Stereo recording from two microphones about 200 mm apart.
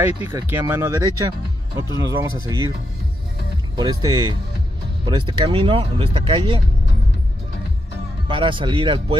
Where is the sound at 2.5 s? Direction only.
20° right (ahead or behind).